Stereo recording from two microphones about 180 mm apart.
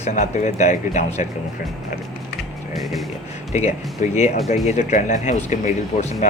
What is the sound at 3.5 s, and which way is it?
Speech, 40° left (ahead or behind).